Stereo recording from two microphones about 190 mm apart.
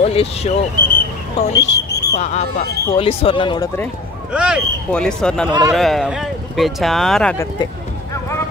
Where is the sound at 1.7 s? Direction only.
60° left (ahead or behind).